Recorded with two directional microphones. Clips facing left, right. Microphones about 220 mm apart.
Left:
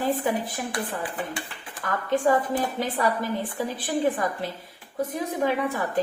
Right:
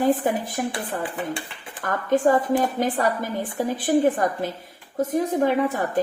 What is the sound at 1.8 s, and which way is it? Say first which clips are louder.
A woman's voice: right 4 dB; 45° right (ahead or behind).